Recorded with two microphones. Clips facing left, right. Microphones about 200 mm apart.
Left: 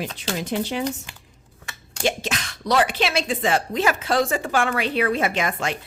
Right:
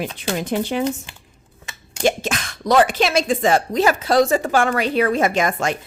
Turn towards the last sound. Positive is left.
turn(degrees=-45)  # may be behind; listen again after turning